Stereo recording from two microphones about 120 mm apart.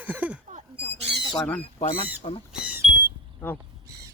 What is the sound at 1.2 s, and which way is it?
Squawk, 35° left (ahead or behind).